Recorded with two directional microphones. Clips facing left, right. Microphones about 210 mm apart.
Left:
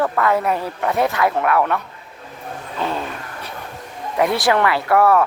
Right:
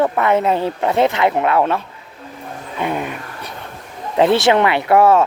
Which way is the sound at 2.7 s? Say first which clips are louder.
Right 3 dB; 15° right (ahead or behind).